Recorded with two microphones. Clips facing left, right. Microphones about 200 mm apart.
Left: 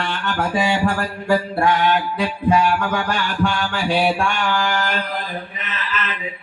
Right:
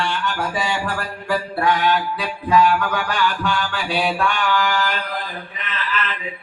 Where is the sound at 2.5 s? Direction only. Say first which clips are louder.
Right 1 dB; 45° left (ahead or behind).